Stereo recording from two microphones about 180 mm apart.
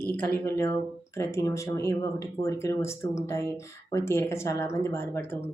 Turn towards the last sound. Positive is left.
turn(degrees=15)  # may be behind; listen again after turning